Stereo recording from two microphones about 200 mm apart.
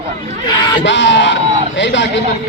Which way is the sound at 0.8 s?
65° left (ahead or behind).